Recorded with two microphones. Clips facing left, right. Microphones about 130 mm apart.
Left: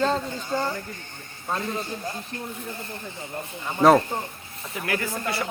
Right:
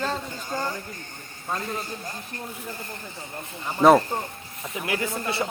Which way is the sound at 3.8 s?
5° right (ahead or behind).